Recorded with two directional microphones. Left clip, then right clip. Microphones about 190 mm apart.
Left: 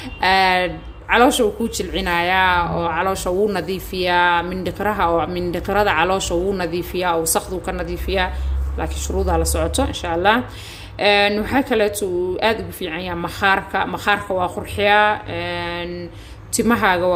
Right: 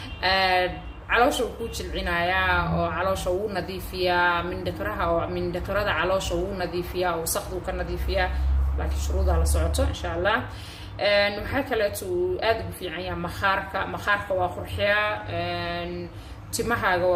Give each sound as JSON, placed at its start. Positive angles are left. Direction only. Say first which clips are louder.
{"t": 0.2, "sound": "speech", "louder": "left 6 dB", "side_deg": 45}
{"t": 9.3, "sound": "speech", "louder": "left 8 dB", "side_deg": 50}